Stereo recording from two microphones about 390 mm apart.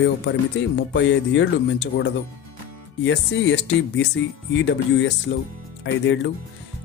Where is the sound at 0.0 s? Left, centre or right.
Left.